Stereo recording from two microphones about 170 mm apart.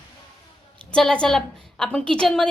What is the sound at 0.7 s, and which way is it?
A woman's voice, 5° left (ahead or behind).